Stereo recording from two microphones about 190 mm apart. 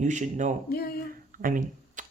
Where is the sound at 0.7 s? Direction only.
55° left (ahead or behind).